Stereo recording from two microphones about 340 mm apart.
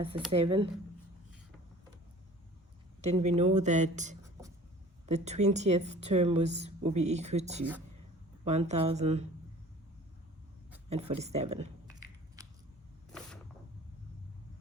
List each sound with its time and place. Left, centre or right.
0.3 s speech: centre
3.0 s a woman's voice: centre
10.8 s a woman's voice: centre
12.4 s biting: centre